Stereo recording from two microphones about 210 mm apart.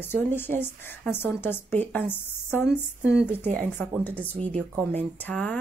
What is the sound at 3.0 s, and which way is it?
Speech, 55° right (ahead or behind).